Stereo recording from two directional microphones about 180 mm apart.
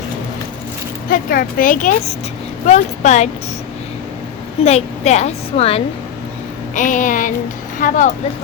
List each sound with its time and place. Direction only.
1.1 s a woman's voice: 50° left (ahead or behind)
4.6 s a woman's voice: 40° left (ahead or behind)
6.7 s speech: 45° left (ahead or behind)